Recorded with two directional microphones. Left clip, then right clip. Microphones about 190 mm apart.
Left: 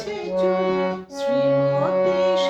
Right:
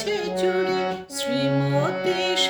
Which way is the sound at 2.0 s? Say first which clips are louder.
Left 3 dB; 10° right (ahead or behind).